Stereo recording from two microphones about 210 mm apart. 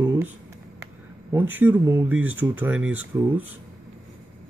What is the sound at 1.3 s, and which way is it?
Speech, 10° right (ahead or behind).